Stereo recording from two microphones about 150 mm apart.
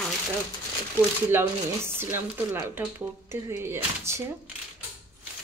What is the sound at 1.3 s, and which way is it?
Speech, 15° right (ahead or behind).